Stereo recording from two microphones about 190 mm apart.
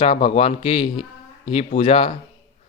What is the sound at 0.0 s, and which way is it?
A man's voice, 30° left (ahead or behind).